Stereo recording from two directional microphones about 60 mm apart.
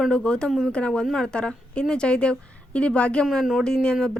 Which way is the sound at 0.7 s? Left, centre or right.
Centre.